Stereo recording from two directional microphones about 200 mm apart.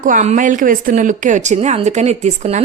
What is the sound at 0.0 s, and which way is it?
Speech, 40° right (ahead or behind).